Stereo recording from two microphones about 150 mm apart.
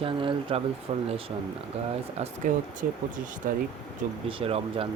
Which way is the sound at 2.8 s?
65° right (ahead or behind).